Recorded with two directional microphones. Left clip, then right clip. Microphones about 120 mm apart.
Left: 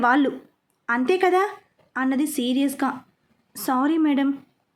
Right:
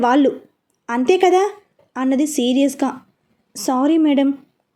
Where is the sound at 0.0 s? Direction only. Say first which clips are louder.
Right 4 dB; 20° right (ahead or behind).